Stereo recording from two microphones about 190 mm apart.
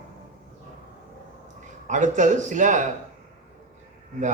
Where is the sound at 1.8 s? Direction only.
40° right (ahead or behind).